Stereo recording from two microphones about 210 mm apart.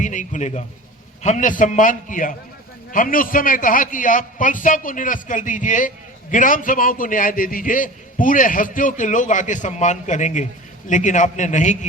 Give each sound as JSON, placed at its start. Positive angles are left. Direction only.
{"t": 0.0, "sound": "a man's voice", "side_deg": 35}